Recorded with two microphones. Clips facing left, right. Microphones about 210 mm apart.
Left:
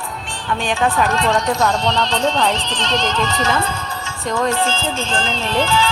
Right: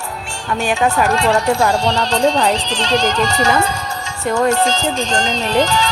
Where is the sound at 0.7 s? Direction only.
10° right (ahead or behind).